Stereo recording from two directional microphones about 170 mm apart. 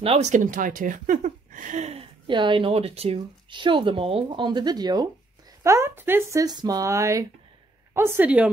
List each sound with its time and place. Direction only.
0.0 s speech: 40° right (ahead or behind); by 8.5 s 10° right (ahead or behind)